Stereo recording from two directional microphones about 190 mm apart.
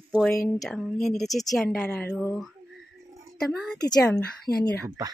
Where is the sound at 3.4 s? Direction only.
5° left (ahead or behind).